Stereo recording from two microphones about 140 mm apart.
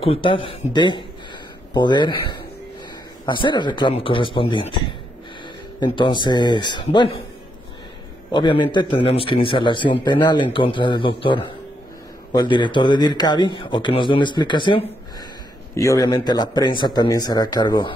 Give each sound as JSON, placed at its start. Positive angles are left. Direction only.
{"t": 0.0, "sound": "speech", "side_deg": 40}
{"t": 3.3, "sound": "speech", "side_deg": 35}
{"t": 5.8, "sound": "speech", "side_deg": 35}
{"t": 8.3, "sound": "speech", "side_deg": 35}
{"t": 15.7, "sound": "speech", "side_deg": 20}